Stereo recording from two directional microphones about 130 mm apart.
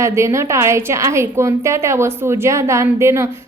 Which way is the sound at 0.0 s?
20° right (ahead or behind).